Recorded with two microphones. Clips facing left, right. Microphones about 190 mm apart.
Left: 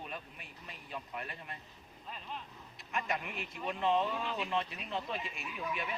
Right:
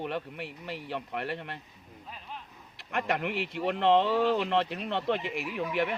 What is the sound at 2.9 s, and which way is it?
Speech, 70° right (ahead or behind).